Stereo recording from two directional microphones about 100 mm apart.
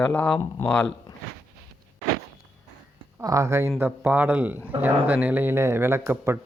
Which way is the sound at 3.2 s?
35° right (ahead or behind).